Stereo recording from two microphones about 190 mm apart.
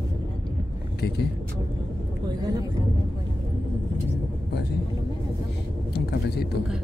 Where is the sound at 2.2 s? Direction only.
20° right (ahead or behind).